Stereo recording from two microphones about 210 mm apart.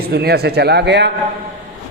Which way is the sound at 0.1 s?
50° right (ahead or behind).